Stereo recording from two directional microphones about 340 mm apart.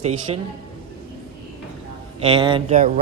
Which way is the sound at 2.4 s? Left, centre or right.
Centre.